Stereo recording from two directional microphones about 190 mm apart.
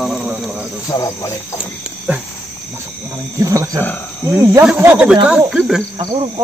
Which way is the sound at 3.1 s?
15° right (ahead or behind).